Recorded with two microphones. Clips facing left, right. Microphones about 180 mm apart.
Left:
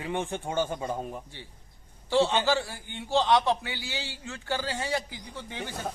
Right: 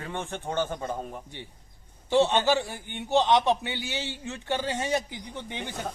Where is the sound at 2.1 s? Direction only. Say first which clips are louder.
Right 2 dB; 20° right (ahead or behind).